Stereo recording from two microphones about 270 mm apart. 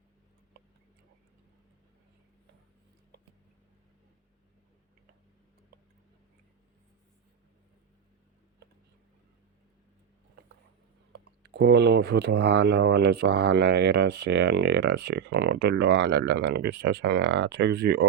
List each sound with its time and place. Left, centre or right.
11.1 s speech: right